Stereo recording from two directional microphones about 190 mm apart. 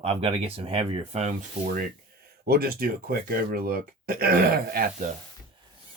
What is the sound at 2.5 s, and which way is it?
Speech, 55° right (ahead or behind).